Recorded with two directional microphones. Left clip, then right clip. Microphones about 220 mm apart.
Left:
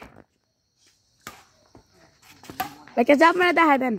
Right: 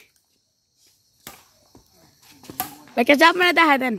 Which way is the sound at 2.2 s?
Centre (ahead or behind).